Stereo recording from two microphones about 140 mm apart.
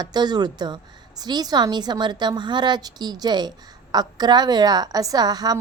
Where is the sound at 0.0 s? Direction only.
30° right (ahead or behind).